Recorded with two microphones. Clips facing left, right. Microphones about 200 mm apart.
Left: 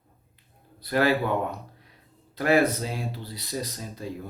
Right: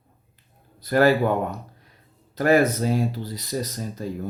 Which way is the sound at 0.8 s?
45° right (ahead or behind).